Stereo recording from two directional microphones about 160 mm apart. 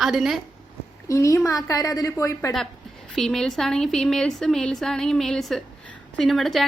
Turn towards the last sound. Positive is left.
turn(degrees=0)  # may be behind; listen again after turning